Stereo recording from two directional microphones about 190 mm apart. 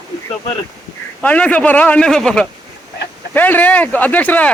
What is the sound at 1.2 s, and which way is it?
Speech, 5° left (ahead or behind).